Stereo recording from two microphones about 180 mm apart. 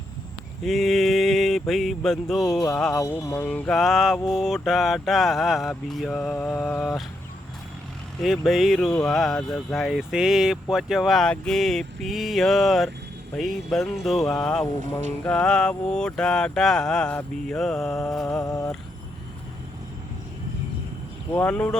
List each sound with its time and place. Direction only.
0.6 s speech: centre (ahead or behind)
2.9 s speech: 20° left (ahead or behind)
8.2 s speech: centre (ahead or behind)
18.4 s a sound: 20° left (ahead or behind)
21.3 s speech: 5° left (ahead or behind)